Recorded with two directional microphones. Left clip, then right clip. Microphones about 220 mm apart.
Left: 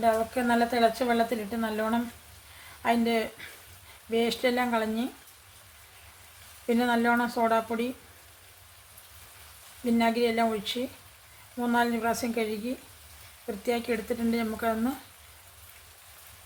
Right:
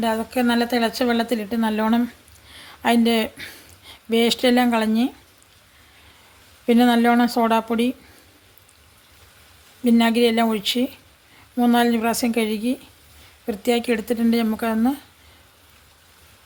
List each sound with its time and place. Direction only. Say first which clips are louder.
0.0 s a woman's voice: right 3 dB; 45° right (ahead or behind)
6.7 s a woman's voice: right 8 dB; 40° right (ahead or behind)
9.8 s a woman's voice: right 8 dB; 45° right (ahead or behind)
13.6 s a woman's voice: right 8 dB; 45° right (ahead or behind)